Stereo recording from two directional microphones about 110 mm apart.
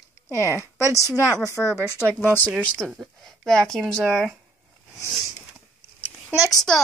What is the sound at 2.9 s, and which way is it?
Speech, centre (ahead or behind).